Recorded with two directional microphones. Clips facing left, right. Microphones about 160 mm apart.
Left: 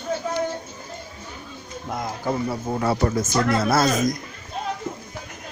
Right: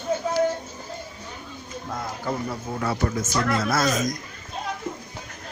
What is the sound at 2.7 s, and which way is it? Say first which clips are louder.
Speech: left 4 dB; 30° left (ahead or behind).